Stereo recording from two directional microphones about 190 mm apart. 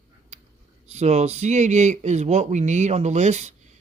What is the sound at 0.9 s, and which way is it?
A man's voice, 35° right (ahead or behind).